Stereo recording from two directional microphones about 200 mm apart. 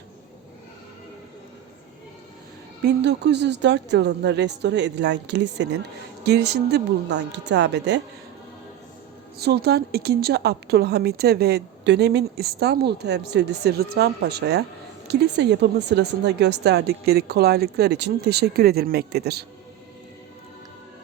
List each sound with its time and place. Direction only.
2.8 s a woman's voice: 60° right (ahead or behind)
9.4 s a woman's voice: 55° right (ahead or behind)